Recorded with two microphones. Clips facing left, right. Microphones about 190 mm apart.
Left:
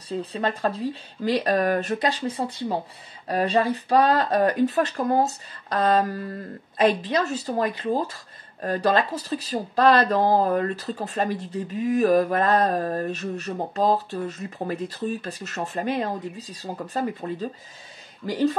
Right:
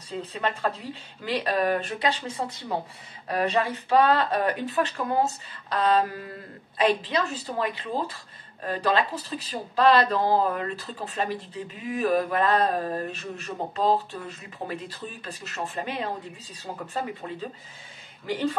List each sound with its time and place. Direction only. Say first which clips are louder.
0.3 s speech: left 2 dB; 35° left (ahead or behind)